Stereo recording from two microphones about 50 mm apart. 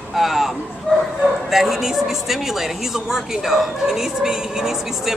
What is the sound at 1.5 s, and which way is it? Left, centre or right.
A woman's voice, centre.